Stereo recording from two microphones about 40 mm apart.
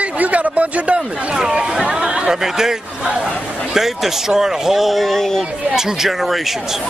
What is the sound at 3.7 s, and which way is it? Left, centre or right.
Speech, centre.